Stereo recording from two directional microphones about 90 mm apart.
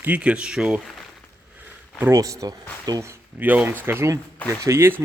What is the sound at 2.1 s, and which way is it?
Speech, 40° right (ahead or behind).